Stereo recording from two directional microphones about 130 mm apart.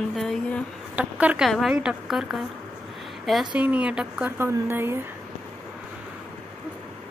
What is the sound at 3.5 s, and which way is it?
Speech, 10° right (ahead or behind).